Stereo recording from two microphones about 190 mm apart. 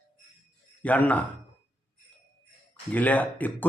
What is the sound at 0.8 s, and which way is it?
Speech, 10° left (ahead or behind).